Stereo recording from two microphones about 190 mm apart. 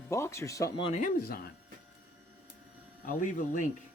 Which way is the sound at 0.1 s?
15° left (ahead or behind).